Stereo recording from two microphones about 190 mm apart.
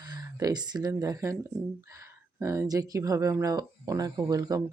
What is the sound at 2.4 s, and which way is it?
Speech, 15° right (ahead or behind).